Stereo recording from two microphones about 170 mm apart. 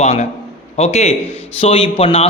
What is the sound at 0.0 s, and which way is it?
A man's voice, 40° left (ahead or behind).